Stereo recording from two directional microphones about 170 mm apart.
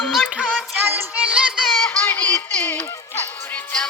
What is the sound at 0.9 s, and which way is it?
Music, 10° right (ahead or behind).